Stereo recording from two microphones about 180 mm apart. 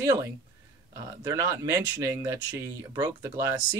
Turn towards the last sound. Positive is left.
turn(degrees=-15)  # may be behind; listen again after turning